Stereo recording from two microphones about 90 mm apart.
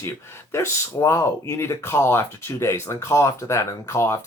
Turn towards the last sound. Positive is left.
turn(degrees=30)  # may be behind; listen again after turning